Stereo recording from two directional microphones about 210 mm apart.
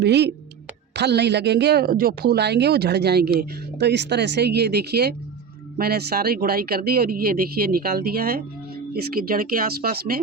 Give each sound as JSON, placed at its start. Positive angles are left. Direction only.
{"t": 0.0, "sound": "speech", "side_deg": -50}